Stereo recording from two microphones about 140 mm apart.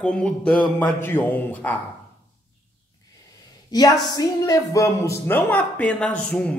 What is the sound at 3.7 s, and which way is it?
A woman's voice, 30° left (ahead or behind).